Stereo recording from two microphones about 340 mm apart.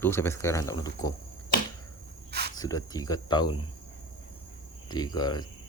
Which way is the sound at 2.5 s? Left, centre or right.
Centre.